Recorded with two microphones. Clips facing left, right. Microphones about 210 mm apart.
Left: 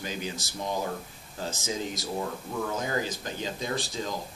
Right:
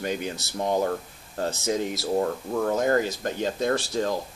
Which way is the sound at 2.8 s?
55° right (ahead or behind).